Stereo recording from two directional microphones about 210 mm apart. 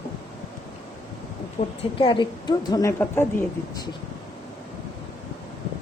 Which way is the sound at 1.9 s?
25° left (ahead or behind).